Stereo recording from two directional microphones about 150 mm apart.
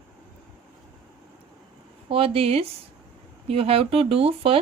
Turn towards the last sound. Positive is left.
turn(degrees=-40)  # may be behind; listen again after turning